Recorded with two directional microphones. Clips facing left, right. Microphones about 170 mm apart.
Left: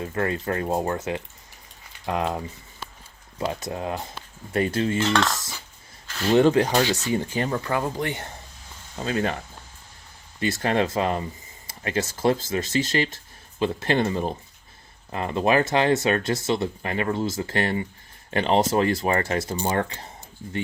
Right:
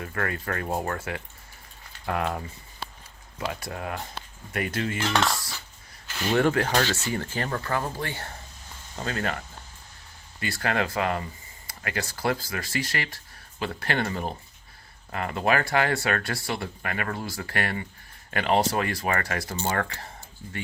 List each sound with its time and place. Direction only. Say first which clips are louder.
0.0 s speech: left 5 dB; 25° left (ahead or behind)
5.1 s cutlery: left 2 dB; centre (ahead or behind)
6.1 s a sound: left 4 dB; 5° right (ahead or behind)
6.3 s speech: left 5 dB; 20° left (ahead or behind)
10.4 s speech: left 5 dB; 20° left (ahead or behind)